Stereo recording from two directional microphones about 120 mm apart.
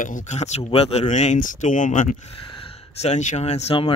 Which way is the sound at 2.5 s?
55° left (ahead or behind).